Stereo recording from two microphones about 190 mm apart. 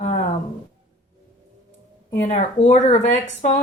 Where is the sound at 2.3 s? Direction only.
35° left (ahead or behind).